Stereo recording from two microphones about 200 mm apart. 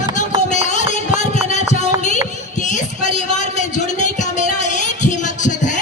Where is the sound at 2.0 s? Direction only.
35° left (ahead or behind).